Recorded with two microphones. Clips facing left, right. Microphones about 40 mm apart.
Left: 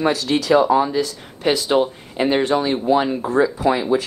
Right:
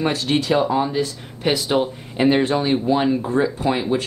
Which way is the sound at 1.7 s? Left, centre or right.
Centre.